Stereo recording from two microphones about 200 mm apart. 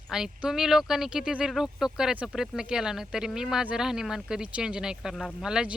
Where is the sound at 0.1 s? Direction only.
5° right (ahead or behind).